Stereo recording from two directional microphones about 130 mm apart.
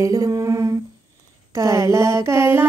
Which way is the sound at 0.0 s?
25° right (ahead or behind).